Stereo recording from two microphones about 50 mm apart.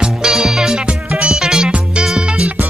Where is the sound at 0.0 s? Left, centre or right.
Centre.